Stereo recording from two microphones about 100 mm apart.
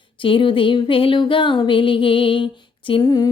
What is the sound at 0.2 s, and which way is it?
Speech, 60° left (ahead or behind).